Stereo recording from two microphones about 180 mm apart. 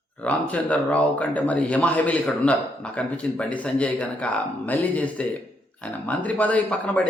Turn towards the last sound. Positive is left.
turn(degrees=10)  # may be behind; listen again after turning